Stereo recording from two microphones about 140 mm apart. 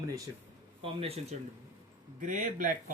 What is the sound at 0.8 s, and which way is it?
Speech, 45° right (ahead or behind).